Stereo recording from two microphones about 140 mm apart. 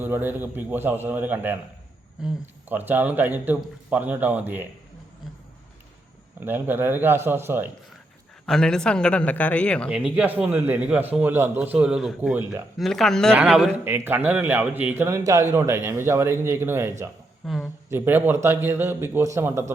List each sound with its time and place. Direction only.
0.0 s a man's voice: 15° right (ahead or behind)
6.4 s a man's voice: 15° right (ahead or behind)
8.4 s speech: 5° left (ahead or behind)
9.9 s a man's voice: 10° right (ahead or behind)
13.3 s a man's voice: 5° right (ahead or behind)
17.4 s speech: centre (ahead or behind)
17.8 s a man's voice: 15° right (ahead or behind)